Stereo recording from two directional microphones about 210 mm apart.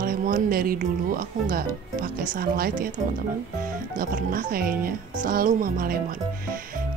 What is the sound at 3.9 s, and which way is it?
Speech, 40° right (ahead or behind).